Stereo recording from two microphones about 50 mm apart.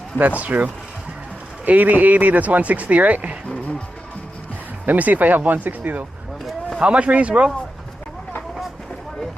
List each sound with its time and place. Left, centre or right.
0.2 s speech: right
4.9 s speech: right
6.7 s speech: right